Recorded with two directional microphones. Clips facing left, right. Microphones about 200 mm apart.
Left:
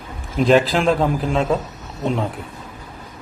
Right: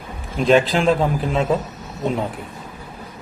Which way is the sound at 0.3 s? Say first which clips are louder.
Left 1 dB; centre (ahead or behind).